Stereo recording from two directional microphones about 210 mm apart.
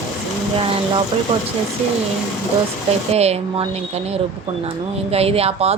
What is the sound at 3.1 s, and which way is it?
Speech, 30° right (ahead or behind).